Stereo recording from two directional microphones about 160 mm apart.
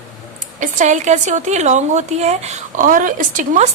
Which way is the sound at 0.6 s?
50° right (ahead or behind).